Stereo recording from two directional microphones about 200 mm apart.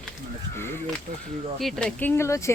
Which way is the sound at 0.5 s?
10° left (ahead or behind).